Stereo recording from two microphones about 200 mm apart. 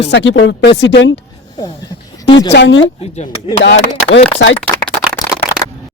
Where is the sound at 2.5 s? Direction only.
60° left (ahead or behind).